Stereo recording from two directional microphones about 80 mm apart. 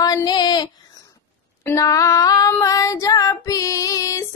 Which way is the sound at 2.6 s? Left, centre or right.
Left.